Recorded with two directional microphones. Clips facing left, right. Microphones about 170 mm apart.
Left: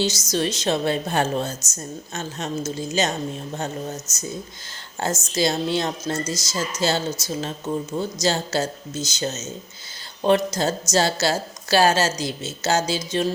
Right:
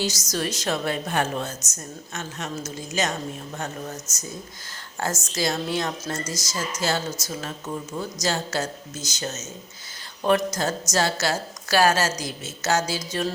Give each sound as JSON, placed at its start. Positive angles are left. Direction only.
{"t": 0.0, "sound": "a woman's voice", "side_deg": 25}
{"t": 5.3, "sound": "a woman's voice", "side_deg": 25}